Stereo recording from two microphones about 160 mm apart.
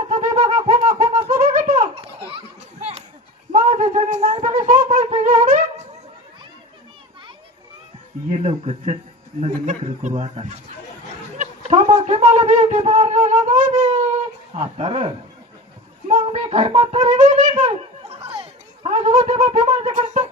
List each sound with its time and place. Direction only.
0.2 s wind instrument: 50° right (ahead or behind)
1.4 s a sound: 55° right (ahead or behind)
3.5 s a sound: 45° right (ahead or behind)
5.2 s wind instrument: 55° right (ahead or behind)
8.3 s a sound: 40° right (ahead or behind)
9.4 s a man's voice: 50° right (ahead or behind)
11.3 s shofar: 45° right (ahead or behind)
14.5 s speech: 40° right (ahead or behind)
16.0 s music: 40° right (ahead or behind)
19.9 s wind instrument: 50° right (ahead or behind)